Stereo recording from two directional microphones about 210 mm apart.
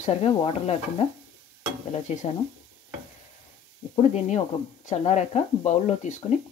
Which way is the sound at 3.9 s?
35° left (ahead or behind).